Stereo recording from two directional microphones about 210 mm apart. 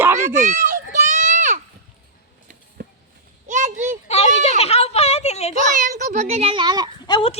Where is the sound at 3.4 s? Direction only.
35° right (ahead or behind).